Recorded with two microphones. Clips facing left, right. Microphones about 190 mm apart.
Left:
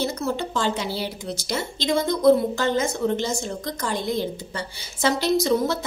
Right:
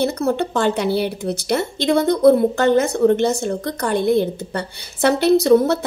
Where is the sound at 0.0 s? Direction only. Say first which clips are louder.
Right 6 dB; 60° right (ahead or behind).